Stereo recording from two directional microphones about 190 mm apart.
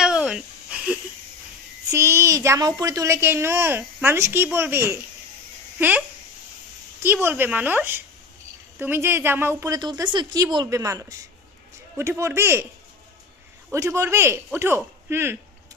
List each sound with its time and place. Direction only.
0.0 s a sound: 5° right (ahead or behind)
1.9 s a woman's voice: 15° right (ahead or behind)
13.7 s a man's voice: 15° right (ahead or behind)